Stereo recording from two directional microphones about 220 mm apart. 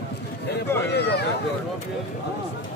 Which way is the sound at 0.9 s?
50° left (ahead or behind).